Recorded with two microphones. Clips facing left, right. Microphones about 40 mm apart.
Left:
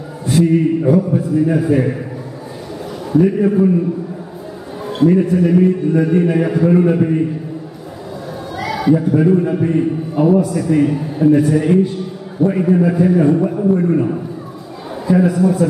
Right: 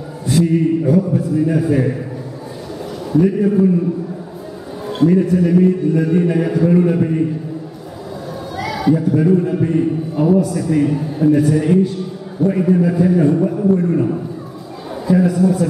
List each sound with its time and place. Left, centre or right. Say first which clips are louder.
0.3 s a man's voice: left 1 dB; centre
3.1 s a man's voice: left 1 dB; centre
4.8 s a man's voice: left 1 dB; centre
8.5 s a man's voice: left 2 dB; centre